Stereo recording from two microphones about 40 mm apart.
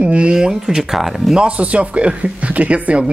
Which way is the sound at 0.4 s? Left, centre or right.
Centre.